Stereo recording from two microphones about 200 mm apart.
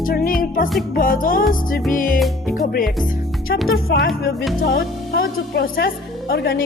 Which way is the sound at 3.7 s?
50° left (ahead or behind).